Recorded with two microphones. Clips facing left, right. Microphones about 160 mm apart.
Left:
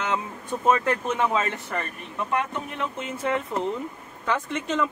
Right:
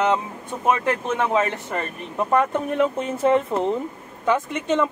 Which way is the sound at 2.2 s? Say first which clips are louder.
Right 7 dB; 45° right (ahead or behind).